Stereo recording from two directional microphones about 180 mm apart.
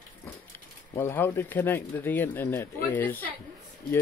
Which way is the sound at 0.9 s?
15° left (ahead or behind).